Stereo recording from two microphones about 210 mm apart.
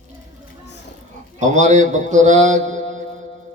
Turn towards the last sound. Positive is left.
turn(degrees=-35)  # may be behind; listen again after turning